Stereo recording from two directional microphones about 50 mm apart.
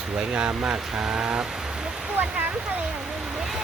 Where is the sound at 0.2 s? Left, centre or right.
Right.